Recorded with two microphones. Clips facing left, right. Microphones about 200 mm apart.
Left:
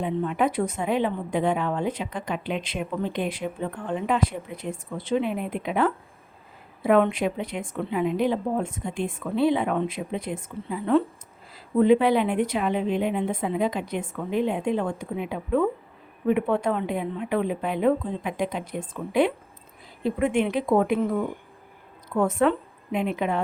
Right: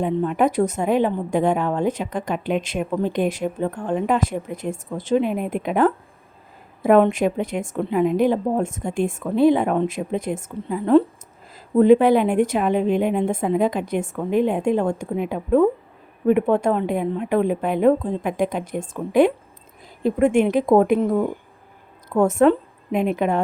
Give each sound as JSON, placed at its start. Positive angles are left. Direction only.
{"t": 0.0, "sound": "a woman's voice", "side_deg": -45}